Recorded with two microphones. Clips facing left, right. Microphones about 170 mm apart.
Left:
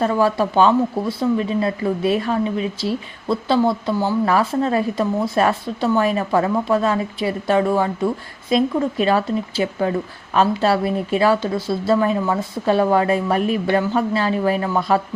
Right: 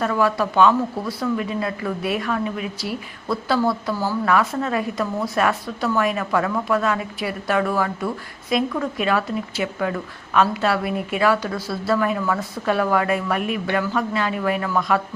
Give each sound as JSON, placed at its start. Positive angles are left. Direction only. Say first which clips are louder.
{"t": 0.0, "sound": "speech", "louder": "left 3 dB", "side_deg": 30}